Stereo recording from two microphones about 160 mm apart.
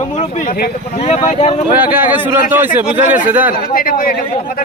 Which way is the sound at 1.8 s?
10° right (ahead or behind).